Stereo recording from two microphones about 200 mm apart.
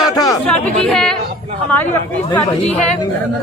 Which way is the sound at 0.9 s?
5° left (ahead or behind).